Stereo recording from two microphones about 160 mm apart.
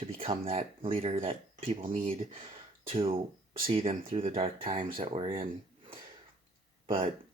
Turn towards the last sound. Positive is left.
turn(degrees=-35)  # may be behind; listen again after turning